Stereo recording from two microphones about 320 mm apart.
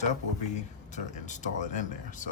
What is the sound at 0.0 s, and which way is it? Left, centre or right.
Speech, left.